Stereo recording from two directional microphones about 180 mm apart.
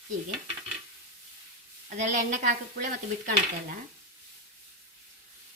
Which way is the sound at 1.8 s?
40° right (ahead or behind).